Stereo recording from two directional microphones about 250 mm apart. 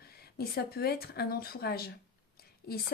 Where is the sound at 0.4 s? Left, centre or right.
Left.